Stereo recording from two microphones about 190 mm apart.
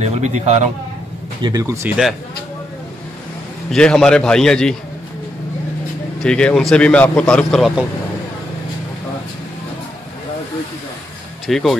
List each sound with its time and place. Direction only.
0.1 s a man's voice: 35° right (ahead or behind)
1.4 s speech: 20° right (ahead or behind)
3.7 s a man's voice: 5° left (ahead or behind)
6.2 s a man's voice: 5° left (ahead or behind)
11.4 s speech: centre (ahead or behind)